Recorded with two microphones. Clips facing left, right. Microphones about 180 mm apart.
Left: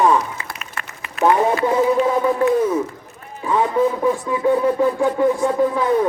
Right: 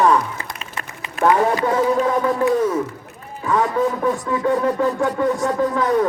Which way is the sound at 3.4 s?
20° left (ahead or behind).